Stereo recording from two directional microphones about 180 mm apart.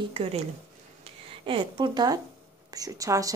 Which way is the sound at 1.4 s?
30° right (ahead or behind).